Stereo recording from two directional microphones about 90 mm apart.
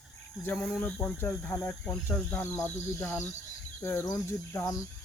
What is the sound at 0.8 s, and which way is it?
Speech, 20° left (ahead or behind).